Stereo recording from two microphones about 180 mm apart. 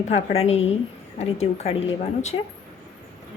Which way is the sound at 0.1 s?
35° left (ahead or behind).